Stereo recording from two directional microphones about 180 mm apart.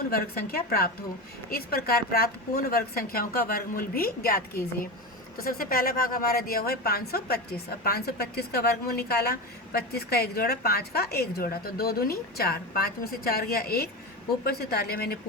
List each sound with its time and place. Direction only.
0.1 s a woman's voice: 55° left (ahead or behind)